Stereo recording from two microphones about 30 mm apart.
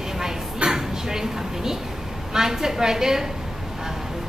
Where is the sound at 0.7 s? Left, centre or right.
Centre.